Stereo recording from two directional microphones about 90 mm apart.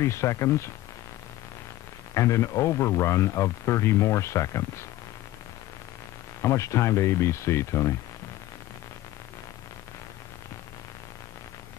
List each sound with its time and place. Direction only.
0.0 s speech: 30° left (ahead or behind)
2.1 s speech: 35° left (ahead or behind)
6.4 s speech: 35° left (ahead or behind)